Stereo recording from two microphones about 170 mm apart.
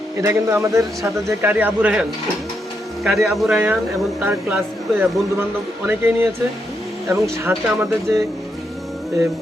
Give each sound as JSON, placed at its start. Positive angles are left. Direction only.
{"t": 0.2, "sound": "speech", "side_deg": -15}